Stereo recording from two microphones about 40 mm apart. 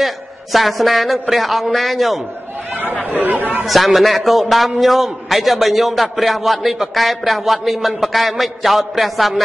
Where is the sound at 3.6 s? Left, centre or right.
Centre.